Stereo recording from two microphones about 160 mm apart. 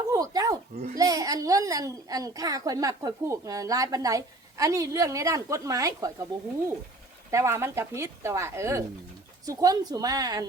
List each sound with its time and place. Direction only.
0.1 s a sound: 20° right (ahead or behind)
0.9 s a child's voice: 20° right (ahead or behind)
7.3 s a child's voice: 15° right (ahead or behind)